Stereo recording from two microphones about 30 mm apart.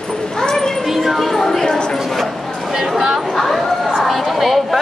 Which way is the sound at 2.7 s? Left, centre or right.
Centre.